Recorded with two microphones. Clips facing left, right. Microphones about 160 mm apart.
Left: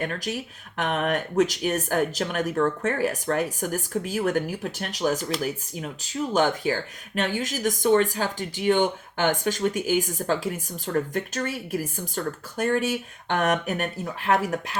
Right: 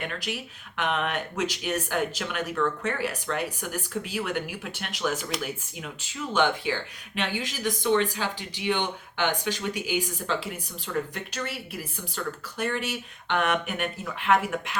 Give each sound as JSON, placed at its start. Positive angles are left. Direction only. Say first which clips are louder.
{"t": 0.0, "sound": "speech", "louder": "left 4 dB", "side_deg": 40}